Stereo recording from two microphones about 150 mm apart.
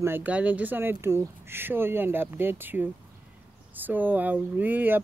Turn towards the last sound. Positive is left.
turn(degrees=-15)  # may be behind; listen again after turning